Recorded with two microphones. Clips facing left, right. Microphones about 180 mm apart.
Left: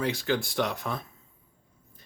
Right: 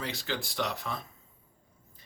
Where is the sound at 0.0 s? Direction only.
50° left (ahead or behind).